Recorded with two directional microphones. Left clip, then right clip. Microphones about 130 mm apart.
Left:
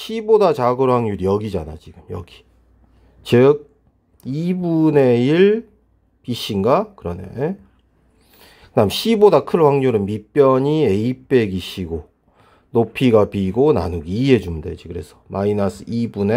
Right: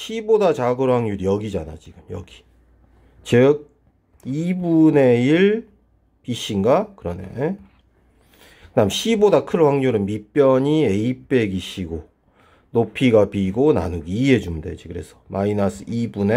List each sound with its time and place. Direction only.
0.0 s speech: 30° left (ahead or behind)
3.3 s speech: 30° left (ahead or behind)